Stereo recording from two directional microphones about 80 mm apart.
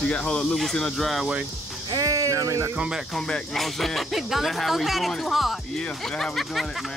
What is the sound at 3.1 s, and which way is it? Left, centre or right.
Speech, centre.